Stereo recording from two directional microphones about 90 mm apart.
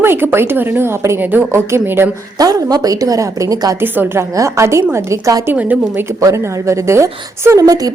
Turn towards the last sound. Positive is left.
turn(degrees=-45)  # may be behind; listen again after turning